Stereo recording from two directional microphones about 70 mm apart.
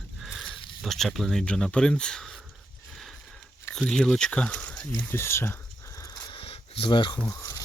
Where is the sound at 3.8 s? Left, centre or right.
Centre.